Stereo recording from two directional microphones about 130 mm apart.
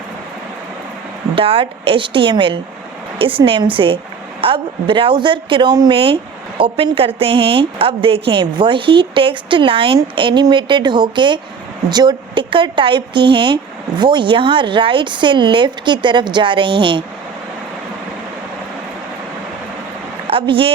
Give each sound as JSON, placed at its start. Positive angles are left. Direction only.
{"t": 1.4, "sound": "a woman's voice", "side_deg": -45}
{"t": 20.2, "sound": "a woman's voice", "side_deg": -45}